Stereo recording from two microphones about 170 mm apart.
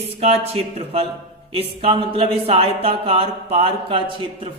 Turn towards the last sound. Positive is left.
turn(degrees=-30)  # may be behind; listen again after turning